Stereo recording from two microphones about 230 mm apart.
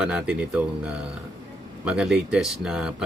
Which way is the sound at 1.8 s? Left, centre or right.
Centre.